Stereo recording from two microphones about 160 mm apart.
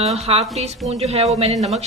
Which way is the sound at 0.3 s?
35° right (ahead or behind).